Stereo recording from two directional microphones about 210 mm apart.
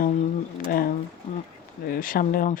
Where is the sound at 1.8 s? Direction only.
40° left (ahead or behind).